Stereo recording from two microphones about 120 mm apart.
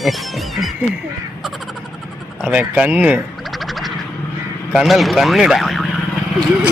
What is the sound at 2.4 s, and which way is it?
Speech, 10° right (ahead or behind).